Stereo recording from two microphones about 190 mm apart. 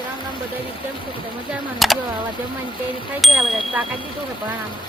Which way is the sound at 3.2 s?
Centre (ahead or behind).